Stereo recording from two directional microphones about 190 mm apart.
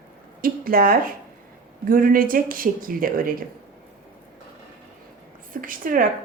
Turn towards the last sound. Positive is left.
turn(degrees=-45)  # may be behind; listen again after turning